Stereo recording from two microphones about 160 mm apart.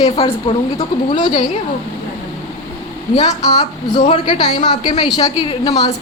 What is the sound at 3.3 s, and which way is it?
A woman's voice, 25° left (ahead or behind).